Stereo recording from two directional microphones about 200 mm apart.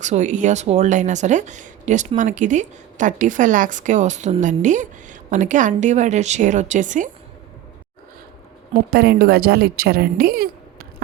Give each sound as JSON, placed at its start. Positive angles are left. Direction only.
{"t": 0.0, "sound": "speech", "side_deg": -35}
{"t": 8.9, "sound": "a woman's voice", "side_deg": -50}